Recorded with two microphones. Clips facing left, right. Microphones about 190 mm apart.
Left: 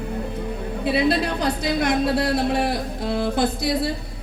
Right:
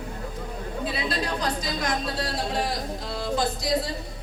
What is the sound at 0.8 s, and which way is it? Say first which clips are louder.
A woman's voice: left 10 dB; 65° left (ahead or behind).